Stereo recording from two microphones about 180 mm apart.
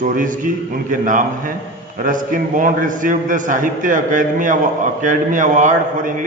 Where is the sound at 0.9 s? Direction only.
45° right (ahead or behind).